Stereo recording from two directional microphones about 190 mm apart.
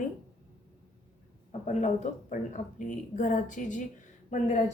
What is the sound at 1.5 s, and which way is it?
A woman's voice, 35° left (ahead or behind).